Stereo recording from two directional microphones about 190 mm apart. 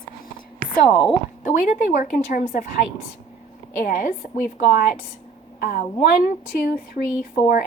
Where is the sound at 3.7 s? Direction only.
50° left (ahead or behind).